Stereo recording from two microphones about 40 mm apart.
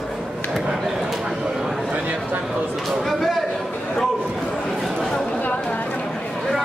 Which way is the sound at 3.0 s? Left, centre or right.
Centre.